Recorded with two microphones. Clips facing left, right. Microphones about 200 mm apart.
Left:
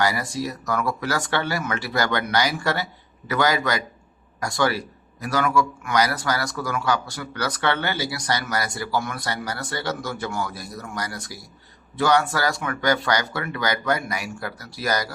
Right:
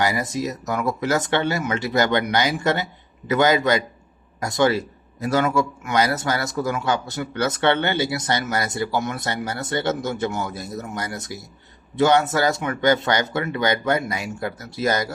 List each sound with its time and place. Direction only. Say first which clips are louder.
0.0 s a man's voice: right 1 dB; 20° right (ahead or behind)